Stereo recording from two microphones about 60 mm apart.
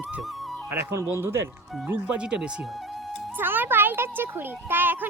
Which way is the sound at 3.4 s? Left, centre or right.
Right.